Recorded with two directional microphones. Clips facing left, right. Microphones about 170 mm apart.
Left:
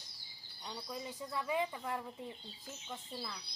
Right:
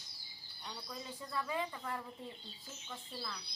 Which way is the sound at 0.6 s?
15° left (ahead or behind).